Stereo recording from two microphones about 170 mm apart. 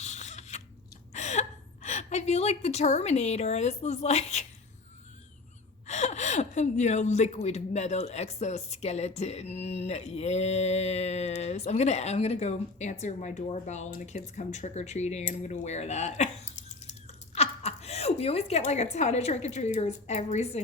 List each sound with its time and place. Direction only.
0.0 s a sound: 40° left (ahead or behind)
1.1 s a woman's voice: 45° left (ahead or behind)
5.9 s a woman's voice: 40° left (ahead or behind)